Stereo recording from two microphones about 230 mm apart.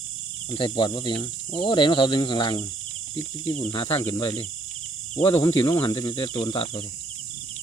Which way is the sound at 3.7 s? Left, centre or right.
Left.